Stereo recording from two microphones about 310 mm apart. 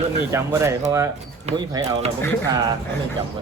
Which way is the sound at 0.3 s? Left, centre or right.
Centre.